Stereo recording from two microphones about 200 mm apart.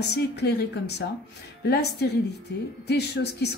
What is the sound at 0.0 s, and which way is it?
A woman's voice, 55° left (ahead or behind).